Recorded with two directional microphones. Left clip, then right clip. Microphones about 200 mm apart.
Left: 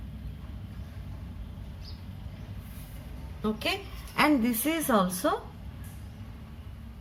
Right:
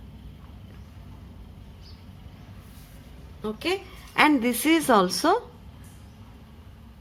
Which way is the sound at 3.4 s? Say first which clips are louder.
Right 2 dB; 40° right (ahead or behind).